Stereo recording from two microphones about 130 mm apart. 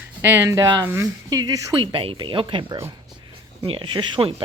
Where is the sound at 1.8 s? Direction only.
45° right (ahead or behind).